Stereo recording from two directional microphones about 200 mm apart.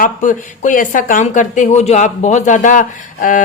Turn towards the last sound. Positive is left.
turn(degrees=40)  # may be behind; listen again after turning